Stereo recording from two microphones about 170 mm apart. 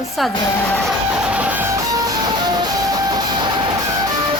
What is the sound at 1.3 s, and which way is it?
Music, 10° right (ahead or behind).